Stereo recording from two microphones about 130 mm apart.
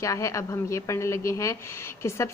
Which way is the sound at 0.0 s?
25° left (ahead or behind).